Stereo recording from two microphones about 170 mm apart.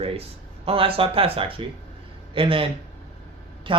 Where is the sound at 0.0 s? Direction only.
35° right (ahead or behind).